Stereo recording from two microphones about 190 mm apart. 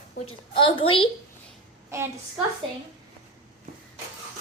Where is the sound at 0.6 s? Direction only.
25° left (ahead or behind).